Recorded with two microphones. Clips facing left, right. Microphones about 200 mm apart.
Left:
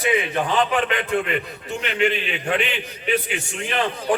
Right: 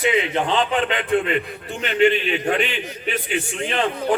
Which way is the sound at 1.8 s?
40° right (ahead or behind).